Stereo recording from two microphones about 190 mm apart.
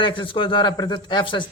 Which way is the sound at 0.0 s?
25° left (ahead or behind).